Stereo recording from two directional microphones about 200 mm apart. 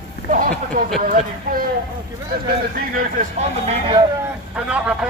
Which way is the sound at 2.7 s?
45° right (ahead or behind).